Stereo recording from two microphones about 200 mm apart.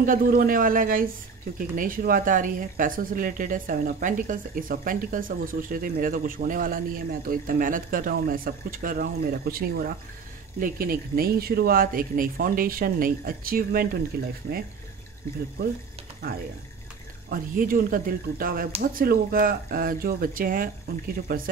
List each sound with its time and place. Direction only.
0.0 s a man's voice: 45° right (ahead or behind)
17.3 s a man's voice: 45° right (ahead or behind)